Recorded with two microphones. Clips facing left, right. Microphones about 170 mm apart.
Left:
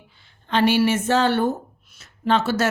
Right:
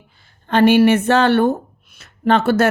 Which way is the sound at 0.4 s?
50° right (ahead or behind).